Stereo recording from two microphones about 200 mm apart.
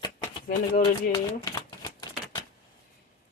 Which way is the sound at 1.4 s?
20° left (ahead or behind).